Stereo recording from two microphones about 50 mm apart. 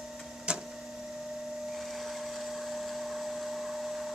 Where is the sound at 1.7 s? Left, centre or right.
Centre.